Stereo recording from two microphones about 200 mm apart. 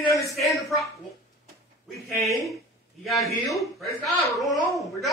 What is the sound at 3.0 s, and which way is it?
A man's voice, centre (ahead or behind).